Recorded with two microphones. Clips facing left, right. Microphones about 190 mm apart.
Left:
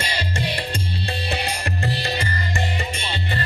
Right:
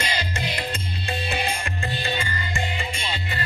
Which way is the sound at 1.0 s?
35° left (ahead or behind).